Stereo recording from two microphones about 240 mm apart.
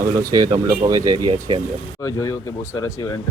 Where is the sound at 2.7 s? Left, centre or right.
Centre.